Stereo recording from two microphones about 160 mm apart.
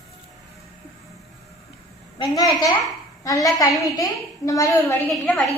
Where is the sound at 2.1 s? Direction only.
25° left (ahead or behind).